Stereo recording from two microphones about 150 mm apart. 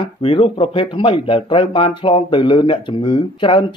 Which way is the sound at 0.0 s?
40° left (ahead or behind).